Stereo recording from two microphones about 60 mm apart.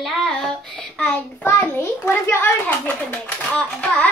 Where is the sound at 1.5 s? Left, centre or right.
Left.